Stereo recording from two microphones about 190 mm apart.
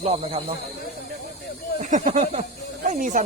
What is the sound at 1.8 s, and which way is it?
Speech, 40° right (ahead or behind).